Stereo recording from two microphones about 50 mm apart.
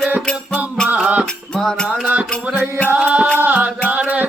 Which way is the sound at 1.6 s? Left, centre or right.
Centre.